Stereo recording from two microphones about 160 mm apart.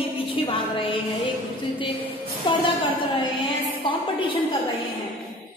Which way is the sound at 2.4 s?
30° left (ahead or behind).